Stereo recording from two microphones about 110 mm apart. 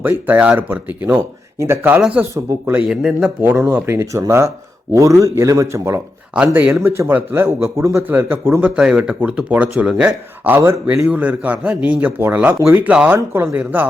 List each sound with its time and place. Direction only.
0.0 s speech: 15° right (ahead or behind)
2.0 s speech: 10° right (ahead or behind)
2.3 s speech: 25° right (ahead or behind)
2.7 s speech: 5° right (ahead or behind); by 6.0 s 25° right (ahead or behind)
6.3 s speech: 15° right (ahead or behind)
10.9 s speech: 10° right (ahead or behind)